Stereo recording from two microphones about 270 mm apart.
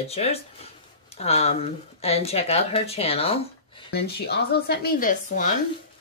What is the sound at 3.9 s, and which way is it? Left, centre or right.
Speech, left.